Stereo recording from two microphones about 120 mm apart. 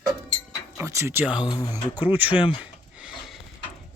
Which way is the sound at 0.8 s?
25° right (ahead or behind).